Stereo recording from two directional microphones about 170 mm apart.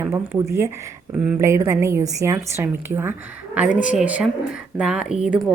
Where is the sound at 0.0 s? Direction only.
15° right (ahead or behind).